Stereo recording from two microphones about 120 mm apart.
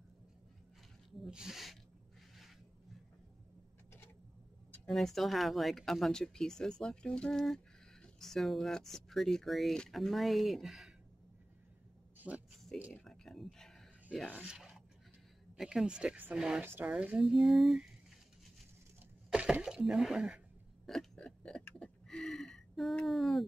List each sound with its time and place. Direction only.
1.2 s speech: 5° right (ahead or behind)
4.8 s speech: 5° left (ahead or behind)
12.2 s speech: 5° right (ahead or behind)
12.9 s a sound: 5° left (ahead or behind)
14.3 s speech: 10° right (ahead or behind)
16.6 s speech: 20° right (ahead or behind)
16.9 s speech: 10° right (ahead or behind)
19.3 s a sound: 5° right (ahead or behind)